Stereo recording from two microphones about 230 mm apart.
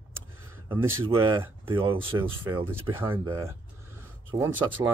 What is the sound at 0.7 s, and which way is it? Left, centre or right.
Speech, centre.